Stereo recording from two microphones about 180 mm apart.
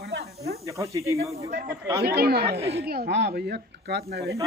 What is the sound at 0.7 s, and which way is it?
Speech, 15° right (ahead or behind).